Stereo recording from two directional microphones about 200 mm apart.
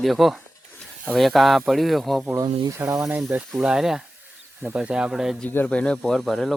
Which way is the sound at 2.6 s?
15° right (ahead or behind).